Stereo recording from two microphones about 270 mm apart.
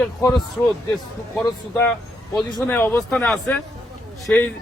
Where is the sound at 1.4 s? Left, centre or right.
Centre.